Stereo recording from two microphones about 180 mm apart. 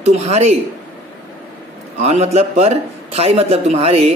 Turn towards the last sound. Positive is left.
turn(degrees=-35)  # may be behind; listen again after turning